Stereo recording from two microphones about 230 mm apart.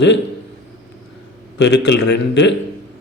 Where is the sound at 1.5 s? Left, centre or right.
Left.